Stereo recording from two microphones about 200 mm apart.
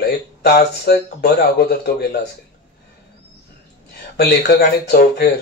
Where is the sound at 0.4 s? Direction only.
50° left (ahead or behind).